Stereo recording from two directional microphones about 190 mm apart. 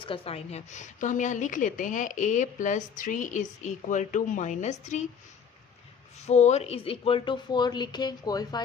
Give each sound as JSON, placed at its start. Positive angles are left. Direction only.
{"t": 0.0, "sound": "a woman's voice", "side_deg": 30}
{"t": 6.1, "sound": "speech", "side_deg": 35}